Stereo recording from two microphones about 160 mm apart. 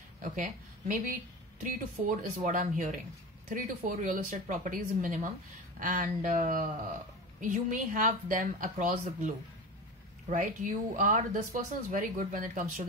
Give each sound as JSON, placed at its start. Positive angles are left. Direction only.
{"t": 0.2, "sound": "speech", "side_deg": -55}